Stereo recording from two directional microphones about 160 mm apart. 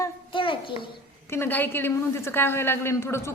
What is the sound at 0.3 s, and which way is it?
Speech, 30° left (ahead or behind).